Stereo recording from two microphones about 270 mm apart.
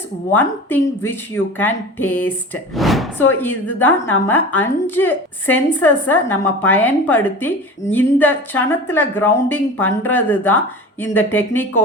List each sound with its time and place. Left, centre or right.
0.3 s speech: centre